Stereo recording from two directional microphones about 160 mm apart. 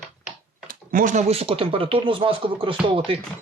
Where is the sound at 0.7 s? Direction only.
60° right (ahead or behind); by 2.7 s 35° right (ahead or behind).